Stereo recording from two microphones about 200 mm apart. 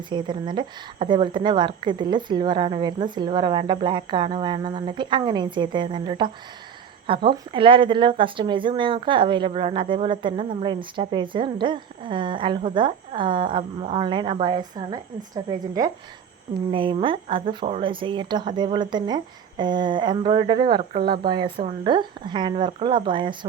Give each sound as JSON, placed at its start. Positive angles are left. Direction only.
{"t": 0.1, "sound": "a woman's voice", "side_deg": -20}
{"t": 20.9, "sound": "speech", "side_deg": -50}
{"t": 21.3, "sound": "speech", "side_deg": -25}